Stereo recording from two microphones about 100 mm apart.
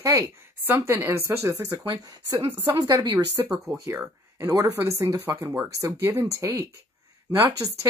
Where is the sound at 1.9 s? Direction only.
45° right (ahead or behind).